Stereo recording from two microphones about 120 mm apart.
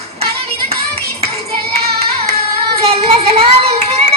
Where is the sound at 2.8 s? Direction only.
55° right (ahead or behind).